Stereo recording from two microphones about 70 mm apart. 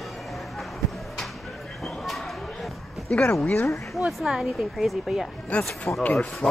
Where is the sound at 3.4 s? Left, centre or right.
Left.